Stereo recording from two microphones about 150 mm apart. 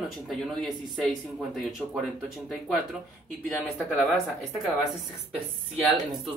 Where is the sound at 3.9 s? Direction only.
5° left (ahead or behind).